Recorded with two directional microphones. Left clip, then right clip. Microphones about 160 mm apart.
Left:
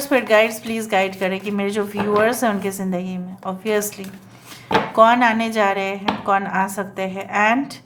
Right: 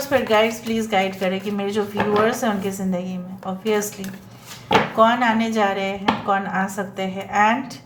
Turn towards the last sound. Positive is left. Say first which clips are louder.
# even
turn(degrees=35)  # may be behind; listen again after turning